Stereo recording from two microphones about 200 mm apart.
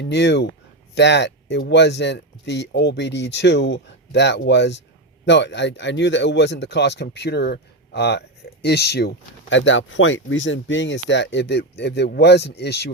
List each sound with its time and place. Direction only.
0.0 s speech: 60° left (ahead or behind)